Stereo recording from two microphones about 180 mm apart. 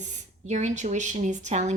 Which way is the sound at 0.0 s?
40° right (ahead or behind).